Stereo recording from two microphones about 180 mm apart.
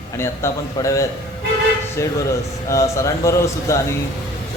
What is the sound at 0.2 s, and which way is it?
A man's voice, 15° left (ahead or behind).